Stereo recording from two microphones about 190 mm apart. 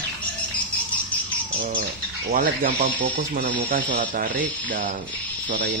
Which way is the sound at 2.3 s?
50° right (ahead or behind).